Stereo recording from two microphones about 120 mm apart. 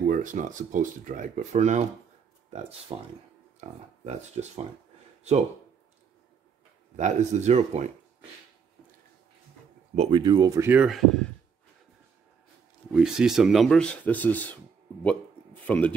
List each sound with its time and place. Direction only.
0.0 s speech: 90° right
2.9 s speech: 40° right (ahead or behind)
3.6 s speech: 70° right (ahead or behind)
7.0 s speech: 75° right (ahead or behind)
9.9 s speech: 60° right (ahead or behind)
10.2 s speech: 35° right (ahead or behind)
10.6 s speech: 15° right (ahead or behind)
10.9 s speech: 5° left (ahead or behind)
12.9 s speech: 5° right (ahead or behind); by 14.6 s 15° left (ahead or behind)
15.6 s speech: 15° left (ahead or behind)